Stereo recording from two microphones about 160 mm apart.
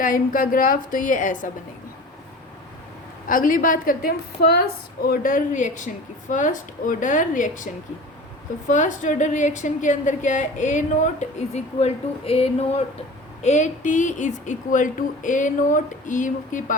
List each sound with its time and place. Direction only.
0.0 s a woman's voice: 60° left (ahead or behind)
3.2 s a woman's voice: 60° left (ahead or behind)